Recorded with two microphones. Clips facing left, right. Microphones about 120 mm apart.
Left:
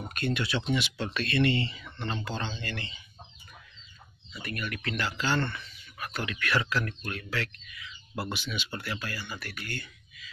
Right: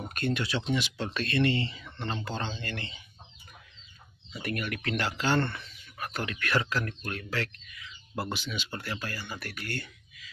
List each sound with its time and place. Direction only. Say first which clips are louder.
0.1 s speech: right 1 dB; 40° right (ahead or behind)
0.4 s speech: left 1 dB; 30° right (ahead or behind)
2.2 s speech: even; 45° right (ahead or behind)
4.4 s speech: right 3 dB; 75° right (ahead or behind); by 5.6 s 50° right (ahead or behind)
5.9 s speech: even; 40° right (ahead or behind)
9.4 s speech: right 2 dB; 60° right (ahead or behind)